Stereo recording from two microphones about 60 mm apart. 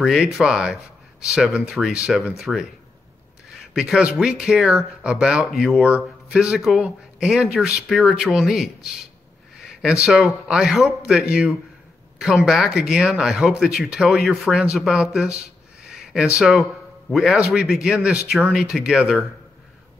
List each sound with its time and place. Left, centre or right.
0.0 s speech: centre
5.8 s speech: centre
12.2 s speech: centre
12.7 s speech: centre
14.9 s speech: centre
15.9 s a sound: centre
16.3 s speech: centre
17.1 s speech: centre